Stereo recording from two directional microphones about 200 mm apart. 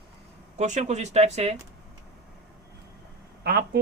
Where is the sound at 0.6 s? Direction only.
35° right (ahead or behind).